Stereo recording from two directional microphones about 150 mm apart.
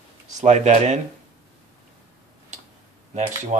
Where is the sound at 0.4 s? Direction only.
50° right (ahead or behind).